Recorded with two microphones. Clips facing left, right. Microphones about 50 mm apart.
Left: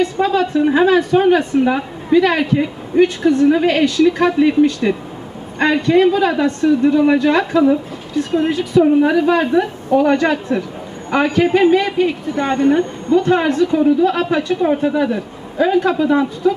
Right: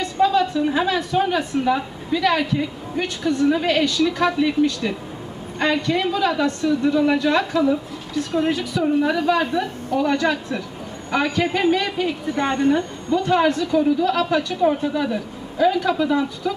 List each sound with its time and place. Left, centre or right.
0.0 s a woman's voice: left
8.7 s a woman's voice: left